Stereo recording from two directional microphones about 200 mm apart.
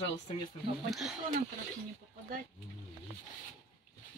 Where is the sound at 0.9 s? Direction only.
Centre (ahead or behind).